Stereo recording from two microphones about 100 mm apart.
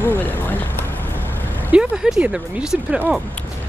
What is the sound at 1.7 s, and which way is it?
Speech, 10° right (ahead or behind).